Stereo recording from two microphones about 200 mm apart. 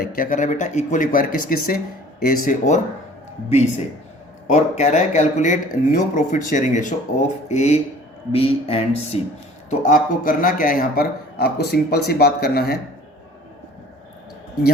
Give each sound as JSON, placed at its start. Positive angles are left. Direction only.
{"t": 0.0, "sound": "a man's voice", "side_deg": 45}
{"t": 4.5, "sound": "a man's voice", "side_deg": 35}